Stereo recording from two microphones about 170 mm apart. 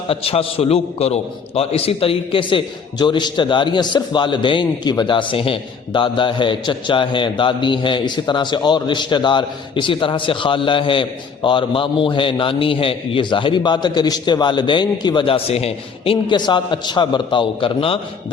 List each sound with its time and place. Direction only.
0.1 s a man's voice: 35° left (ahead or behind)